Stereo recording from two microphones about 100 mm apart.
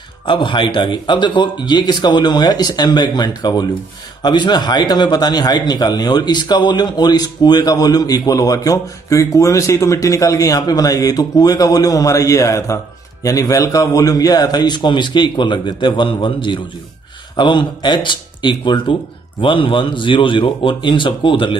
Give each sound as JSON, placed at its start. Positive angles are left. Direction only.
{"t": 0.2, "sound": "a man's voice", "side_deg": 55}